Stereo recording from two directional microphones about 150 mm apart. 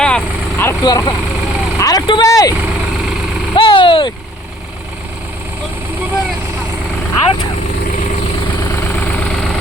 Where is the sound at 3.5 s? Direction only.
35° left (ahead or behind).